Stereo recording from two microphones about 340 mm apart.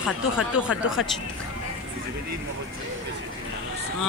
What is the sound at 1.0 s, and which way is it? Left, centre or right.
Speech, left.